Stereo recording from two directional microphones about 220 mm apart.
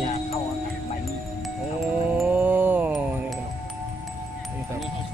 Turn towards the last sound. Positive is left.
turn(degrees=-5)  # may be behind; listen again after turning